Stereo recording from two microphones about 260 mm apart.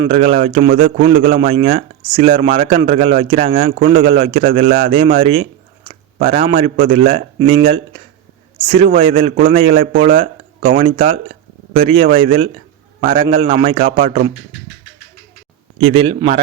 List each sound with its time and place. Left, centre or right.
0.0 s a man's voice: right
15.8 s speech: right